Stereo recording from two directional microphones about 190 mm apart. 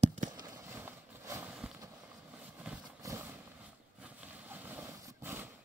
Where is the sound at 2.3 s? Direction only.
5° right (ahead or behind).